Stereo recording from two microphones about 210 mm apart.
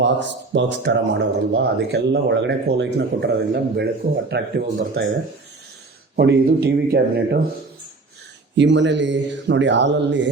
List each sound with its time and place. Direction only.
0.0 s speech: 55° right (ahead or behind)
6.1 s speech: 50° right (ahead or behind)
8.5 s speech: 60° right (ahead or behind)